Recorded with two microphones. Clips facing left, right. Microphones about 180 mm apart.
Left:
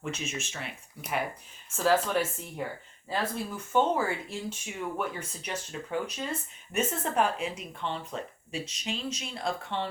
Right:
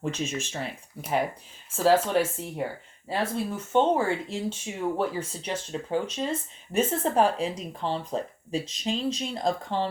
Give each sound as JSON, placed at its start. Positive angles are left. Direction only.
{"t": 0.0, "sound": "speech", "side_deg": -35}
{"t": 1.7, "sound": "speech", "side_deg": -30}